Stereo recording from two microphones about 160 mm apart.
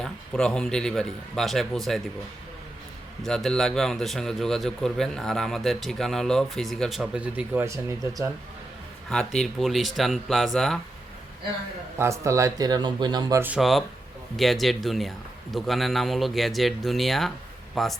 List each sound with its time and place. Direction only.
0.0 s a man's voice: 5° left (ahead or behind)
3.2 s a man's voice: 5° left (ahead or behind); by 8.3 s 15° right (ahead or behind)
9.0 s a man's voice: 5° left (ahead or behind)
11.9 s speech: 20° right (ahead or behind)
13.4 s a man's voice: 5° right (ahead or behind)